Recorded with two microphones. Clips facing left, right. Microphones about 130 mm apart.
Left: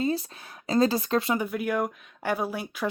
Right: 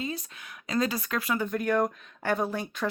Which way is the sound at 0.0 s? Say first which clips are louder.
Left 7 dB; 35° left (ahead or behind).